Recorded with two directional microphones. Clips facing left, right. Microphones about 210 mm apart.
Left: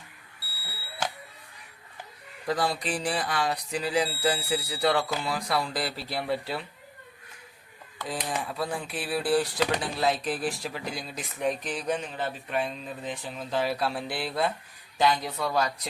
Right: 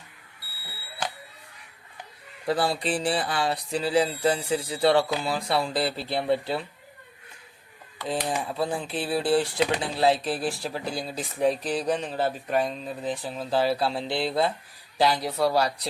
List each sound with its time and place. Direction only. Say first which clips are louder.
2.5 s speech: right 3 dB; 30° right (ahead or behind)
8.0 s speech: right 4 dB; 25° right (ahead or behind)